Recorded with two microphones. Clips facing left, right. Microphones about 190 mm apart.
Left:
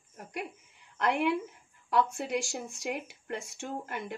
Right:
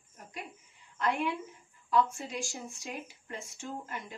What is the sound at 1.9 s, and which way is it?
Speech, 70° left (ahead or behind).